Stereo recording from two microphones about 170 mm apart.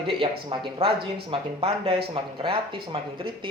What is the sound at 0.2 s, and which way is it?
Speech, 30° right (ahead or behind).